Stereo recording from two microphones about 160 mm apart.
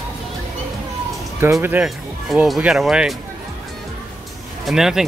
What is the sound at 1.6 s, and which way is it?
Speech, 10° right (ahead or behind).